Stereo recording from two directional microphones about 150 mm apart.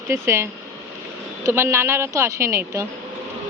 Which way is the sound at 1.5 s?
15° right (ahead or behind).